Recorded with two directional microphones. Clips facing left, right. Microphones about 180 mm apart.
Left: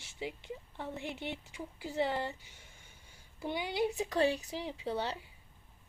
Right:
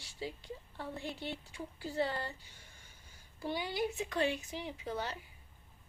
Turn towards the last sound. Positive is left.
turn(degrees=30)  # may be behind; listen again after turning